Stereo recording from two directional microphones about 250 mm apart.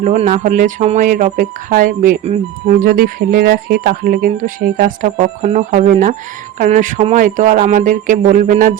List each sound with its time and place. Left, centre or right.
0.0 s speech: right